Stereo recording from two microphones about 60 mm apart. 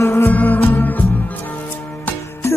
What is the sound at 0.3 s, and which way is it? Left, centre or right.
Music, left.